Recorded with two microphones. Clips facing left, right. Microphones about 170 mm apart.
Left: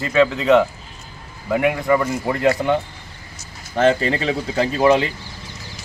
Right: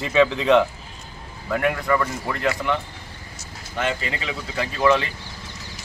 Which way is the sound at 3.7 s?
40° left (ahead or behind).